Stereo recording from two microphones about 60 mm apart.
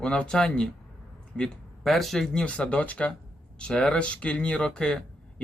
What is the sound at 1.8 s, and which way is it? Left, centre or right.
Speech, centre.